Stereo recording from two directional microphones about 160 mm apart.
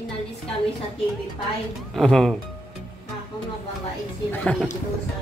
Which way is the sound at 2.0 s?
Centre (ahead or behind).